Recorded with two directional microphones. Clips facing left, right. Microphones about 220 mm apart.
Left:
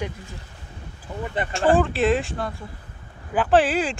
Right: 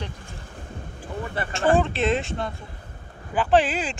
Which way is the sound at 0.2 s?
50° right (ahead or behind).